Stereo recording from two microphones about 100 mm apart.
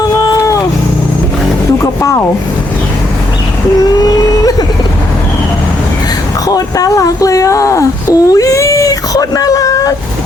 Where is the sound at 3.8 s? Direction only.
40° left (ahead or behind).